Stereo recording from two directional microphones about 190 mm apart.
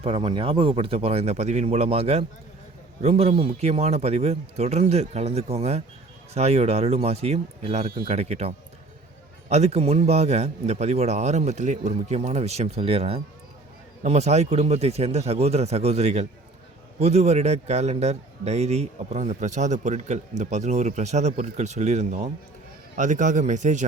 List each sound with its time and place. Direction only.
0.0 s a man's voice: 30° right (ahead or behind)